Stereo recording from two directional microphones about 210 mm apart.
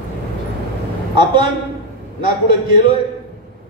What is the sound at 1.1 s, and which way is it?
Speech, 20° right (ahead or behind).